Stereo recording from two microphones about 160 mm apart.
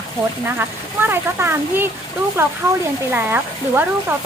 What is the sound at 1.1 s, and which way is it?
Speech, 15° right (ahead or behind).